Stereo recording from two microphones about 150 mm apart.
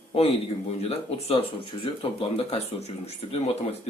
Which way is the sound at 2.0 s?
40° left (ahead or behind).